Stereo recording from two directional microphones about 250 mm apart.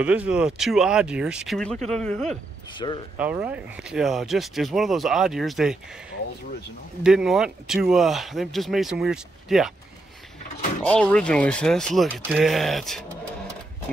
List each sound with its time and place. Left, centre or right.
0.0 s speech: centre
2.8 s speech: centre
3.2 s speech: centre
7.0 s speech: centre
10.9 s speech: centre